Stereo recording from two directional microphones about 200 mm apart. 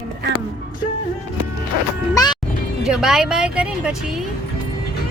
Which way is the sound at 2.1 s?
20° left (ahead or behind).